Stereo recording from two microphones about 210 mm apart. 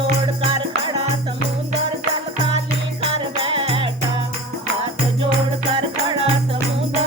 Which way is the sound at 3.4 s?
25° right (ahead or behind).